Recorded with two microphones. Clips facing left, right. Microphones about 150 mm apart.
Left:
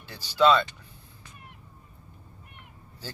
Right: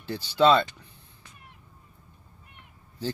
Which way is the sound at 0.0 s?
30° right (ahead or behind).